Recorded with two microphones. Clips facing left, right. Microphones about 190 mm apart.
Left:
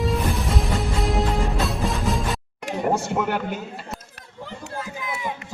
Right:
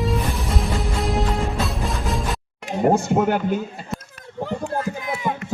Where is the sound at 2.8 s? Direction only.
40° right (ahead or behind).